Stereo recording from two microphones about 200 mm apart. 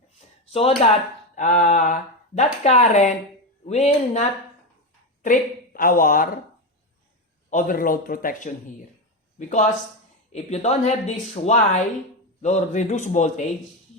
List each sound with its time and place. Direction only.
0.5 s speech: 30° left (ahead or behind)
1.4 s a woman's voice: 40° left (ahead or behind)
7.5 s a man's voice: 45° left (ahead or behind)